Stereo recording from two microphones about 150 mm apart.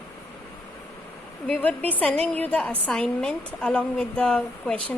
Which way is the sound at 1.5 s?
10° left (ahead or behind).